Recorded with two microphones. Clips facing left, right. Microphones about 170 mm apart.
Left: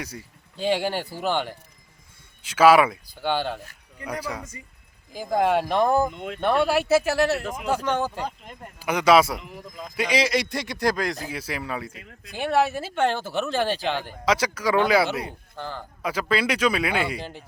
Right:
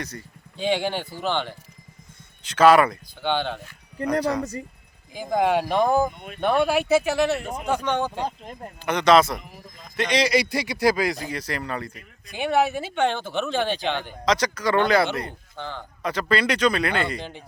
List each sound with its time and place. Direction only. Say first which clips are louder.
0.0 s speech: right 1 dB; 5° left (ahead or behind)
5.1 s speech: even; centre (ahead or behind)
6.1 s speech: left 6 dB; 90° left
6.4 s speech: right 1 dB; centre (ahead or behind)
9.4 s speech: left 6 dB; 90° left
9.9 s speech: right 2 dB; 5° left (ahead or behind)